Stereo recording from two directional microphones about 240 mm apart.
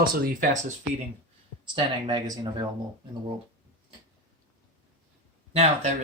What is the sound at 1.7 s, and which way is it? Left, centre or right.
Speech, centre.